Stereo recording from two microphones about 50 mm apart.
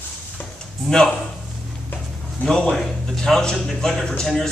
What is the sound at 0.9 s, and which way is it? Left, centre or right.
Speech, centre.